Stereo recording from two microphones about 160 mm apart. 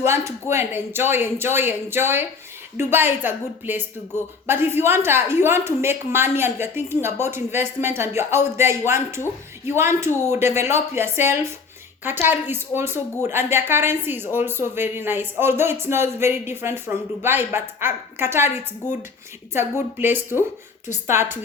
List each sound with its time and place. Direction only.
0.0 s speech: 15° right (ahead or behind)